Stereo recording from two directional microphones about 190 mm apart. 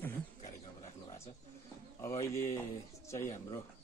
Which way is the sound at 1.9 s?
15° left (ahead or behind).